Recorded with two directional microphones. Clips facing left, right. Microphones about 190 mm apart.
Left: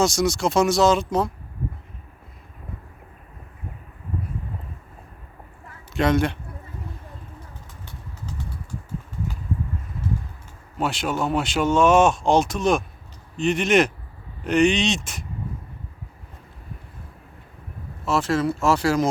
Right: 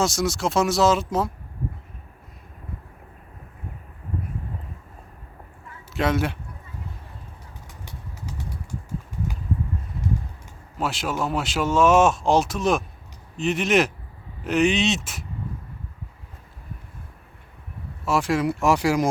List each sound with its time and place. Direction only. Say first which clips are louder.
0.0 s speech: left 3 dB; centre (ahead or behind)
5.9 s speech: left 3 dB; 5° right (ahead or behind)
10.8 s speech: left 2 dB; centre (ahead or behind)
18.0 s speech: even; 10° right (ahead or behind)